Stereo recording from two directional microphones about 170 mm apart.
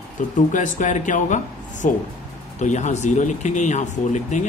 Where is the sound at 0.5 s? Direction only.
50° left (ahead or behind).